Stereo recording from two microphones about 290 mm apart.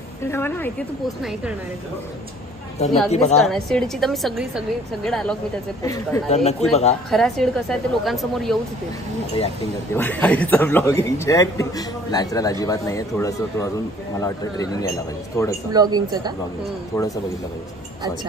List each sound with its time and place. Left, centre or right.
0.2 s a woman's voice: centre
3.1 s speech: left
3.4 s a woman's voice: centre
6.3 s speech: left
7.1 s a woman's voice: centre
9.9 s a man's voice: centre
15.7 s speech: centre
16.9 s a man's voice: centre